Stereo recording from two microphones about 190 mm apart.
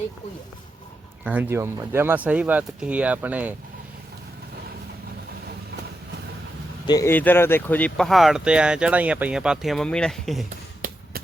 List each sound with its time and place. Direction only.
1.2 s speech: 10° right (ahead or behind)
6.8 s speech: 15° left (ahead or behind); by 10.4 s centre (ahead or behind)
10.8 s basketball bounce: 45° right (ahead or behind)